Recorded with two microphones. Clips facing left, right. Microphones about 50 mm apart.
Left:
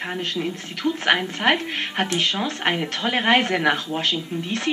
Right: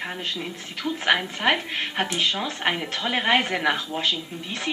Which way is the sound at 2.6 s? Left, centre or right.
Centre.